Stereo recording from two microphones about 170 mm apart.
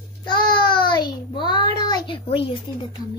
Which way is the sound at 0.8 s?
25° left (ahead or behind).